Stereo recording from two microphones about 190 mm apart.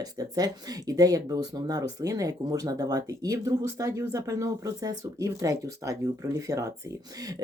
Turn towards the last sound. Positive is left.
turn(degrees=-20)  # may be behind; listen again after turning